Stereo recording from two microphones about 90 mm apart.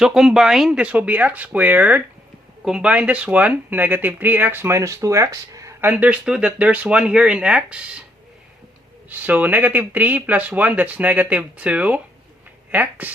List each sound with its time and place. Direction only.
0.0 s speech: 5° right (ahead or behind); by 5.7 s 35° right (ahead or behind)
5.8 s speech: 20° right (ahead or behind)
9.0 s speech: 20° right (ahead or behind)